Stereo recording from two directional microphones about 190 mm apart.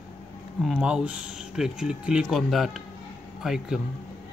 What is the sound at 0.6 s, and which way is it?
Speech, 5° right (ahead or behind).